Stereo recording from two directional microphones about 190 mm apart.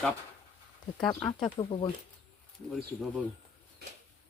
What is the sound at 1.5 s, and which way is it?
Speech, 25° left (ahead or behind).